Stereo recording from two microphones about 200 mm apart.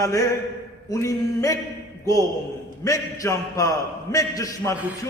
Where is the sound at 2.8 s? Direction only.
15° left (ahead or behind).